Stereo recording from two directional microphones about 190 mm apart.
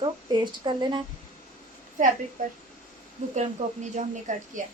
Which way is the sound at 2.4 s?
45° right (ahead or behind).